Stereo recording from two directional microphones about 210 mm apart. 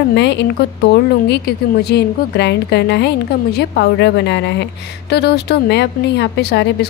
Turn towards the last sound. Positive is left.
turn(degrees=50)  # may be behind; listen again after turning